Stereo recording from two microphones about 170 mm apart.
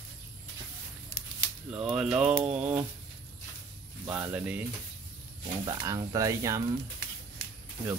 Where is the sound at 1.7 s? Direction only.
5° right (ahead or behind).